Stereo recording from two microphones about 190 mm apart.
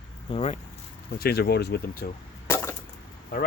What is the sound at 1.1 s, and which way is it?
Speech, 55° left (ahead or behind).